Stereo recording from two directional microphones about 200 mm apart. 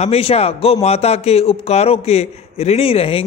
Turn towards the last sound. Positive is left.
turn(degrees=30)  # may be behind; listen again after turning